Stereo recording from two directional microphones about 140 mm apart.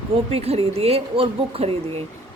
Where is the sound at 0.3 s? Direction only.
45° right (ahead or behind).